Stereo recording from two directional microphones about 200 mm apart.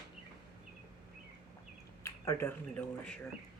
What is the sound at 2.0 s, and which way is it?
Speech, 15° left (ahead or behind).